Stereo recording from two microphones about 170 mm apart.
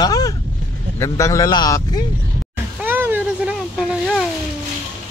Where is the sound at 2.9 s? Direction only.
10° right (ahead or behind).